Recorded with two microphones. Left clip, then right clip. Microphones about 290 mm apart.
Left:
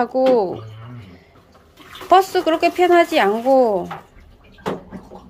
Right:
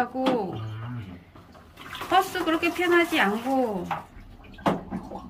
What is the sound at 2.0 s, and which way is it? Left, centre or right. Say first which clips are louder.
Speech: left 9 dB; centre.